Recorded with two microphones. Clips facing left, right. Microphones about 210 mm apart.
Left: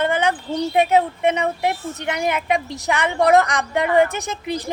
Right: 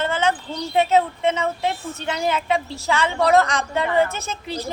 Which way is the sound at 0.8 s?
15° left (ahead or behind).